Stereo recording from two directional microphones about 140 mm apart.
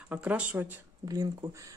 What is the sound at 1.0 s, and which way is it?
Speech, 25° right (ahead or behind).